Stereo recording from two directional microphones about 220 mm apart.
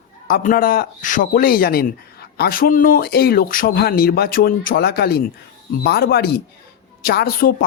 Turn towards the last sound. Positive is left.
turn(degrees=45)  # may be behind; listen again after turning